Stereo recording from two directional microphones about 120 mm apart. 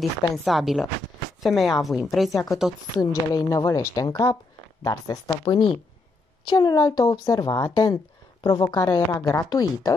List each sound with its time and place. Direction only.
0.0 s a woman's voice: centre (ahead or behind)
3.0 s a woman's voice: 30° left (ahead or behind)